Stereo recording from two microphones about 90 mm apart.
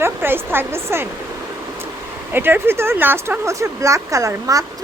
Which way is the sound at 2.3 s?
25° right (ahead or behind).